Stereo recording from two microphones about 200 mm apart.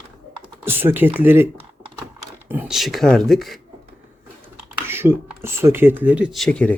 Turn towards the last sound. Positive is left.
turn(degrees=5)  # may be behind; listen again after turning